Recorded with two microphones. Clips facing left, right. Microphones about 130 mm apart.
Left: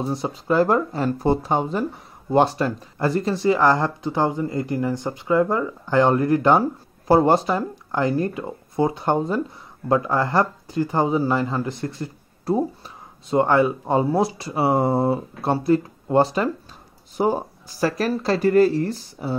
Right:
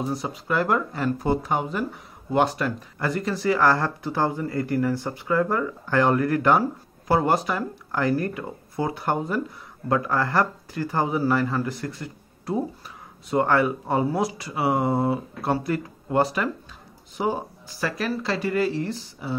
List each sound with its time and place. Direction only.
0.0 s speech: 30° left (ahead or behind)